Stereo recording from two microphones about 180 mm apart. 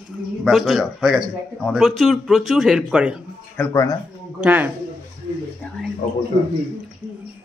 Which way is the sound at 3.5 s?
15° left (ahead or behind).